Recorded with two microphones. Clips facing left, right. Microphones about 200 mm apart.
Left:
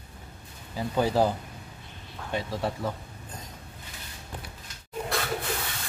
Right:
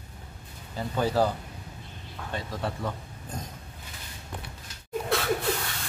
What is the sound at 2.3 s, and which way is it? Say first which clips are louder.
Speech: left 4 dB; 10° left (ahead or behind).